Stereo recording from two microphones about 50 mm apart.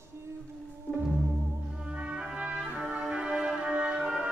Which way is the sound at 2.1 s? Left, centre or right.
Right.